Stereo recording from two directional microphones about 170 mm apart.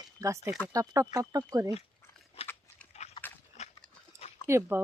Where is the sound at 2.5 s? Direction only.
10° left (ahead or behind).